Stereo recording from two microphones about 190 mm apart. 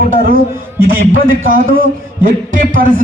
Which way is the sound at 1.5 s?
45° right (ahead or behind).